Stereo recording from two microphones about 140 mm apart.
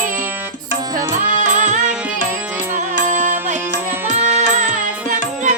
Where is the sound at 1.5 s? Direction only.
65° right (ahead or behind).